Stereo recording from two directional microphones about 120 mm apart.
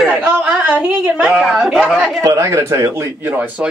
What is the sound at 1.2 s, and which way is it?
Speech, 5° right (ahead or behind).